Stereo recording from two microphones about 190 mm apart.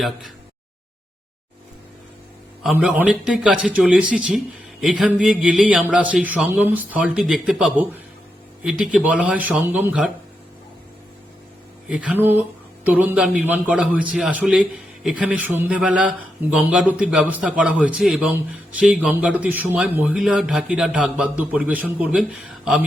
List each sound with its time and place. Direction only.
0.0 s a man's voice: centre (ahead or behind)
2.6 s a man's voice: 5° right (ahead or behind)
11.9 s a man's voice: 5° right (ahead or behind)